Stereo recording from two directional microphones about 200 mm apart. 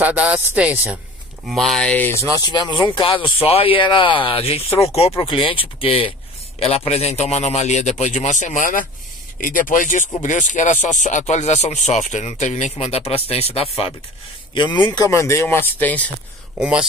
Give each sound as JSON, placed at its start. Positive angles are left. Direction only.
{"t": 0.0, "sound": "speech", "side_deg": -10}
{"t": 1.5, "sound": "speech", "side_deg": 0}
{"t": 2.4, "sound": "speech", "side_deg": 20}
{"t": 16.5, "sound": "speech", "side_deg": -5}